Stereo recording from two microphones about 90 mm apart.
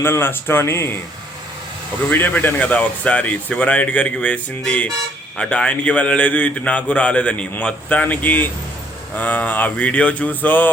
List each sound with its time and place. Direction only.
0.0 s speech: 25° left (ahead or behind)
2.0 s a man's voice: 20° left (ahead or behind)